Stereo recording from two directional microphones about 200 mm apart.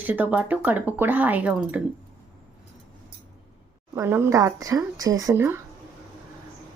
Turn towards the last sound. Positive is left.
turn(degrees=-10)  # may be behind; listen again after turning